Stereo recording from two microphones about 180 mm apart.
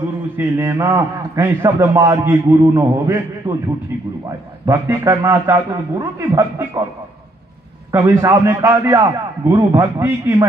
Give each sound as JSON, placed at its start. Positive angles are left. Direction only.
{"t": 0.4, "sound": "a man's voice", "side_deg": -15}
{"t": 7.9, "sound": "a man's voice", "side_deg": -15}